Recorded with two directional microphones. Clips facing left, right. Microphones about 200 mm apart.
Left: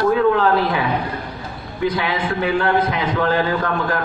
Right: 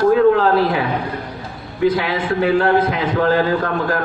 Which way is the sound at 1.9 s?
40° right (ahead or behind).